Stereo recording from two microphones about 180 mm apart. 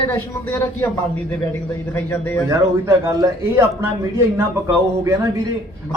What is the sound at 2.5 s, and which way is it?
Speech, 15° right (ahead or behind).